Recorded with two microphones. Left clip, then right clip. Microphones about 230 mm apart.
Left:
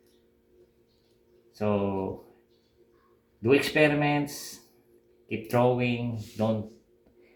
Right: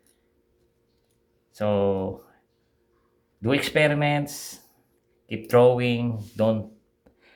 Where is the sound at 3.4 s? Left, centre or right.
Right.